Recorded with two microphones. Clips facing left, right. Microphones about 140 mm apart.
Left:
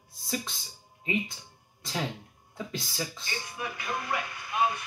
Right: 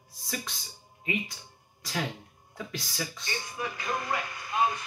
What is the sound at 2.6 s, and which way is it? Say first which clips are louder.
Speech: left 1 dB; 25° left (ahead or behind).